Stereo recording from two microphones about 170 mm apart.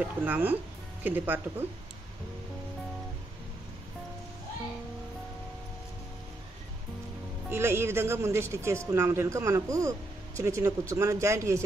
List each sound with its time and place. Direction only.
0.0 s speech: 10° right (ahead or behind)
7.4 s speech: 15° right (ahead or behind)